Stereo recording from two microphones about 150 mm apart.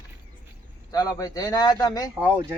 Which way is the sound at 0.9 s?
25° left (ahead or behind).